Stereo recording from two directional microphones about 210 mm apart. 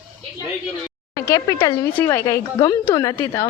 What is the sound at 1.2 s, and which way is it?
A woman's voice, 15° left (ahead or behind).